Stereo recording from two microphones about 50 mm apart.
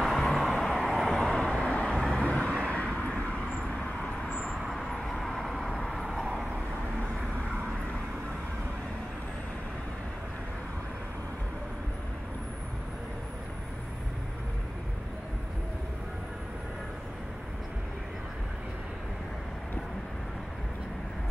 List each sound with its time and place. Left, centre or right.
0.0 s vehicle: centre
1.6 s vehicle: centre